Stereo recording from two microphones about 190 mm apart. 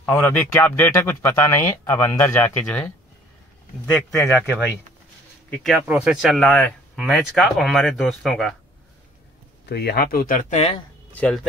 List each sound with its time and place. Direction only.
0.1 s speech: 10° left (ahead or behind)
3.9 s speech: centre (ahead or behind)
9.7 s speech: 60° left (ahead or behind); by 10.8 s 35° left (ahead or behind)
11.1 s speech: 5° left (ahead or behind)